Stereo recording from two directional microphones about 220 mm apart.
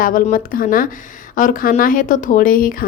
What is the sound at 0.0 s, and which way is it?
A woman's voice, 40° left (ahead or behind).